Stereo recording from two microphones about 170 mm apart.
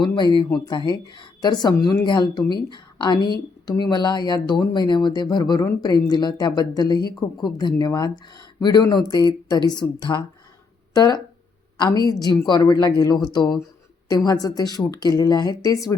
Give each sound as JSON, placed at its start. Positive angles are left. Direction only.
{"t": 0.2, "sound": "speech", "side_deg": 25}